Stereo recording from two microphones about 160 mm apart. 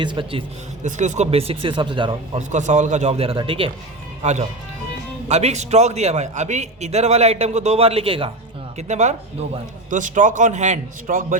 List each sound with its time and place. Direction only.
0.0 s speech: 30° right (ahead or behind)
0.9 s speech: 50° right (ahead or behind); by 2.1 s 30° right (ahead or behind)
2.5 s a man's voice: 50° right (ahead or behind)
4.2 s a man's voice: 45° right (ahead or behind)
8.9 s a man's voice: 45° right (ahead or behind)